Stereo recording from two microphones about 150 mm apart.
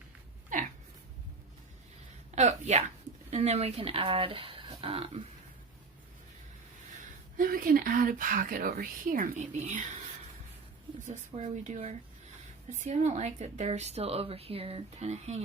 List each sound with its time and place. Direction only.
0.5 s a sound: 60° right (ahead or behind)
2.3 s speech: 50° right (ahead or behind)
7.3 s speech: 70° right (ahead or behind); by 9.8 s 50° right (ahead or behind)
11.0 s a woman's voice: 50° right (ahead or behind)